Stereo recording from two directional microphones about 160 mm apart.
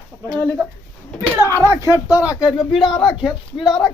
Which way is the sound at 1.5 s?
15° left (ahead or behind).